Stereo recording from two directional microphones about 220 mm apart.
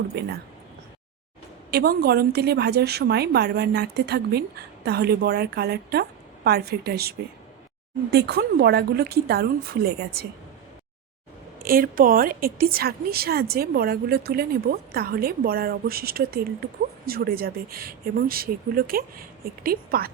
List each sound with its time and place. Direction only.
0.1 s a woman's voice: 50° right (ahead or behind)
1.7 s a woman's voice: 45° right (ahead or behind)
11.6 s a woman's voice: 40° right (ahead or behind)